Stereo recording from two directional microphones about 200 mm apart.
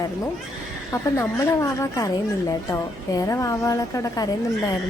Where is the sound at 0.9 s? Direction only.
15° left (ahead or behind).